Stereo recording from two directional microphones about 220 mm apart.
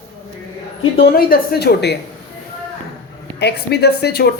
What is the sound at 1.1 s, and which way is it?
Speech, 45° left (ahead or behind).